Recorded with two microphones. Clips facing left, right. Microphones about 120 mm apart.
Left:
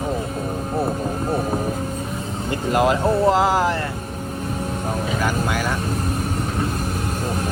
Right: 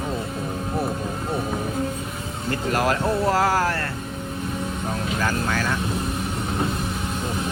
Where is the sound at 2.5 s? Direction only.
20° left (ahead or behind).